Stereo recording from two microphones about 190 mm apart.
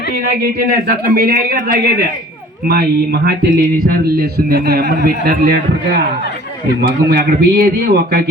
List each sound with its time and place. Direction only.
0.2 s a man's voice: 55° right (ahead or behind)
7.1 s a man's voice: 55° right (ahead or behind)